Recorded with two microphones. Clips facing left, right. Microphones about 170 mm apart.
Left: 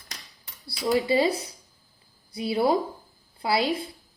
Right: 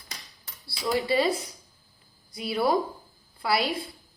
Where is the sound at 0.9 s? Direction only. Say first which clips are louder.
Left 2 dB; 25° left (ahead or behind).